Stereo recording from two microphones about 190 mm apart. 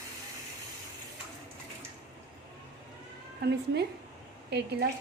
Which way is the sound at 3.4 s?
60° right (ahead or behind).